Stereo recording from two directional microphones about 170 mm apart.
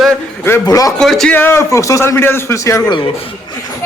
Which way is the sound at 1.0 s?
5° left (ahead or behind).